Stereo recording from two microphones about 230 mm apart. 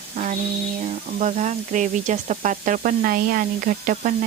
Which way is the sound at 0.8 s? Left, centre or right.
Right.